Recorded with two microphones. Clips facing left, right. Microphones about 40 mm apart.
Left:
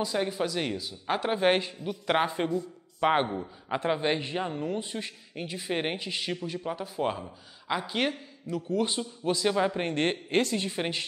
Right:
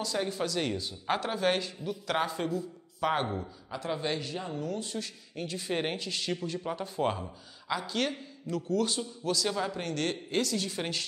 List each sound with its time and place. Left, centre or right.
0.0 s speech: centre
1.2 s a man's voice: left; by 7.3 s centre
7.6 s a man's voice: left